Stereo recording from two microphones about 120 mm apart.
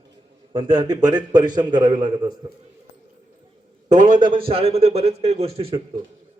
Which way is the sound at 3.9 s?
90° right.